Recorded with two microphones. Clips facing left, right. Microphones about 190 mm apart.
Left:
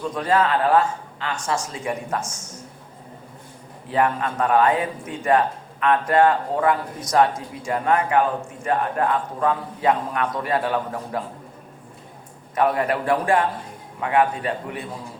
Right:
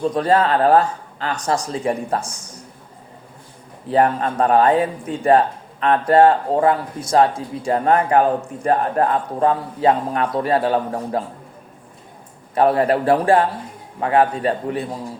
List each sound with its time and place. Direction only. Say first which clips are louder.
0.0 s a man's voice: right 4 dB; 35° right (ahead or behind)
3.8 s a man's voice: right 4 dB; 35° right (ahead or behind)
12.5 s a man's voice: right 5 dB; 30° right (ahead or behind)